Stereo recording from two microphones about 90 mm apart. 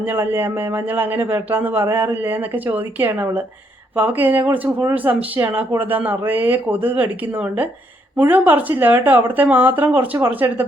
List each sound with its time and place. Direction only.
0.0 s speech: 25° right (ahead or behind)